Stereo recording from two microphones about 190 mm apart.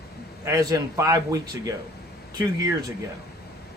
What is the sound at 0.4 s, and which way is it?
A man's voice, 20° right (ahead or behind).